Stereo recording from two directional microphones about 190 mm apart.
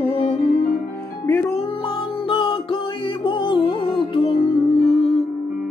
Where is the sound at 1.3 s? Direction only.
10° left (ahead or behind).